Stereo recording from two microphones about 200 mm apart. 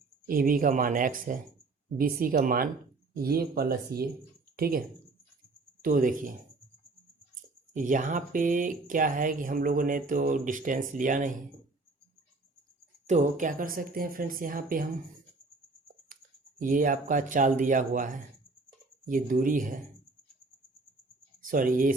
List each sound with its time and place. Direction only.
0.3 s speech: 45° right (ahead or behind)
5.8 s speech: 45° right (ahead or behind)
7.7 s speech: 40° right (ahead or behind)
13.1 s speech: 40° right (ahead or behind)
16.6 s speech: 40° right (ahead or behind)
21.4 s speech: 40° right (ahead or behind)